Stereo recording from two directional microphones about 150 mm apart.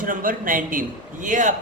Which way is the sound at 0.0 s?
65° right (ahead or behind).